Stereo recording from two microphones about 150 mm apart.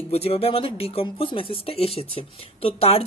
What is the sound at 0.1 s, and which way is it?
Speech, 40° left (ahead or behind).